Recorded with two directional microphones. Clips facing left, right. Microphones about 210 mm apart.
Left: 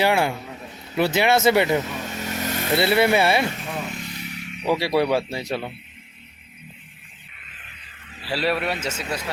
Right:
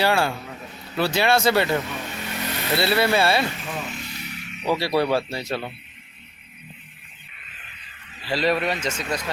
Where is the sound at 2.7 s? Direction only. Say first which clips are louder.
Left 2 dB; 20° left (ahead or behind).